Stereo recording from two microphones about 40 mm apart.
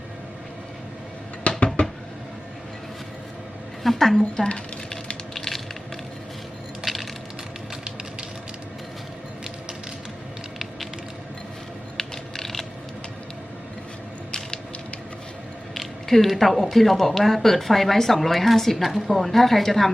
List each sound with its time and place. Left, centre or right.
1.5 s a sound: left
3.8 s a woman's voice: centre
4.4 s a sound: left
5.3 s crushing: centre
6.8 s coin: centre
11.9 s mechanisms: centre
15.7 s speech: centre